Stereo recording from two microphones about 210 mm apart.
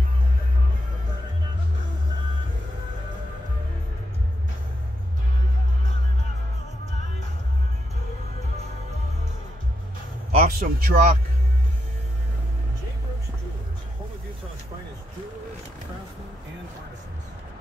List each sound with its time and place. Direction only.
10.3 s a man's voice: 35° right (ahead or behind)